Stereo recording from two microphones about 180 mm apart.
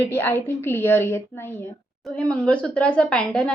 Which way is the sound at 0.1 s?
10° left (ahead or behind).